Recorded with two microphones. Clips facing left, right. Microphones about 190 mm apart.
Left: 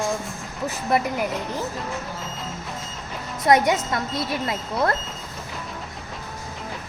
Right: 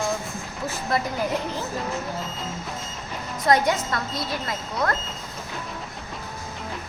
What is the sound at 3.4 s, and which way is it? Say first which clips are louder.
A woman's voice: left 2 dB; 20° left (ahead or behind).